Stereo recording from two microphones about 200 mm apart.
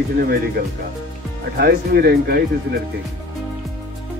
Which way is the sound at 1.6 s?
50° right (ahead or behind).